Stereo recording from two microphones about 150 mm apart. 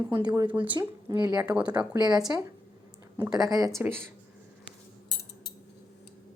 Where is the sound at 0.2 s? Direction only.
30° right (ahead or behind).